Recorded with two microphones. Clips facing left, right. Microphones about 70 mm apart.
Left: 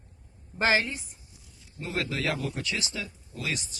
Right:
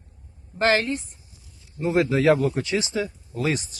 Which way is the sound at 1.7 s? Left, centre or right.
Right.